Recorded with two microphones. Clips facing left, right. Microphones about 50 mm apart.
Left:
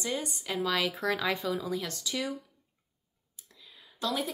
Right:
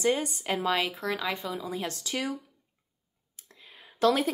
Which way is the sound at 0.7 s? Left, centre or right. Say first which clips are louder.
Right 2 dB; right.